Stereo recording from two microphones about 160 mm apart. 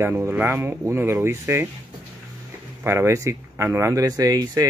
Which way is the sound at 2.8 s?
15° right (ahead or behind).